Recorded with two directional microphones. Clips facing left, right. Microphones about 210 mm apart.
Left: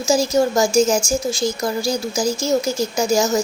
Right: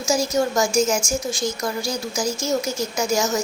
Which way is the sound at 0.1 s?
30° left (ahead or behind).